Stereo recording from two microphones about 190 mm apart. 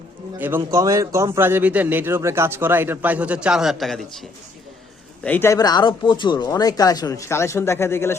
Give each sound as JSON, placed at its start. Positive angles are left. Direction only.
{"t": 0.3, "sound": "speech", "side_deg": -10}